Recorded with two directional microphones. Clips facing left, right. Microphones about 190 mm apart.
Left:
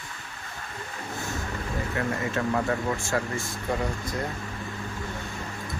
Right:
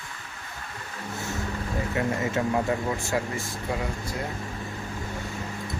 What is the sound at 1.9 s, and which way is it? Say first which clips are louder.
Speech: right 2 dB; 20° right (ahead or behind).